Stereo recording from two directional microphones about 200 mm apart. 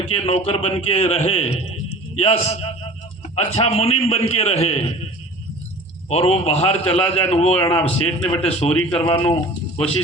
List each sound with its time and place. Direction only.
0.0 s a man's voice: 30° left (ahead or behind)
6.1 s a man's voice: 30° left (ahead or behind)